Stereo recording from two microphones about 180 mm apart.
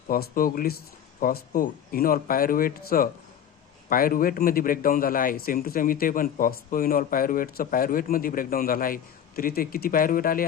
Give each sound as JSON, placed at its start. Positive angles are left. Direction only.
{"t": 0.1, "sound": "a man's voice", "side_deg": 55}